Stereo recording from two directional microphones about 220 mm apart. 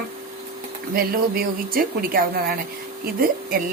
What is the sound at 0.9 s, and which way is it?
A woman's voice, 40° right (ahead or behind).